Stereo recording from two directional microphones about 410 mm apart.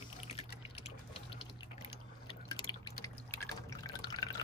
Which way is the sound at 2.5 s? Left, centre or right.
Centre.